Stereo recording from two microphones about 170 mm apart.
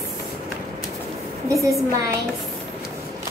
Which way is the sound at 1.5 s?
20° right (ahead or behind).